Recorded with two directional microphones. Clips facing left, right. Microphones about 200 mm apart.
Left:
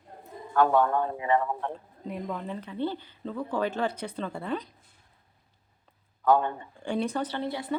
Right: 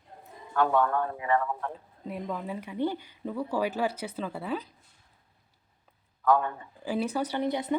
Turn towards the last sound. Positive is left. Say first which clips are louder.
# right 3 dB
turn(degrees=-20)  # may be behind; listen again after turning